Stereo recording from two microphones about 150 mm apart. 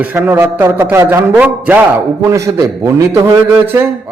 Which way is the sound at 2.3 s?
20° right (ahead or behind).